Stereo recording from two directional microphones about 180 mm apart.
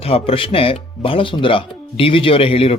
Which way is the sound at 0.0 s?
30° left (ahead or behind).